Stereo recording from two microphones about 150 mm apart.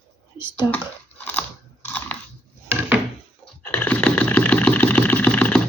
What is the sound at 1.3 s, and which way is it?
Chewing, 10° left (ahead or behind).